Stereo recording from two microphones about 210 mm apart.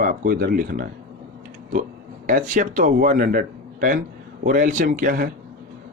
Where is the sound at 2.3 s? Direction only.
40° right (ahead or behind).